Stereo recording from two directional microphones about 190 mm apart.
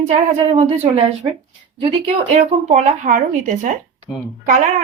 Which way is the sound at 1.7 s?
30° right (ahead or behind).